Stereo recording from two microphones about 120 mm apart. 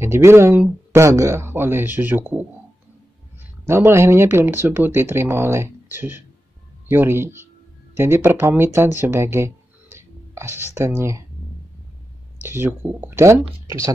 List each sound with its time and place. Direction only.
0.0 s speech: 20° right (ahead or behind)
3.6 s speech: 20° right (ahead or behind)
12.4 s speech: 20° right (ahead or behind)